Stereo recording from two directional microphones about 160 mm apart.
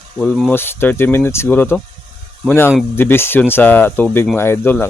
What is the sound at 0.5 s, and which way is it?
Speech, 15° left (ahead or behind).